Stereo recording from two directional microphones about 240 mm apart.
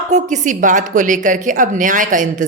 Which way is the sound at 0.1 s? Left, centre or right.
Right.